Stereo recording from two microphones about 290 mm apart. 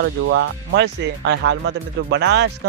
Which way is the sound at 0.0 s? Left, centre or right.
Right.